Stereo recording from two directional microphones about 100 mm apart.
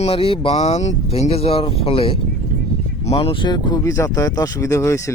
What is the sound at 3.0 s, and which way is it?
Speech, 80° left.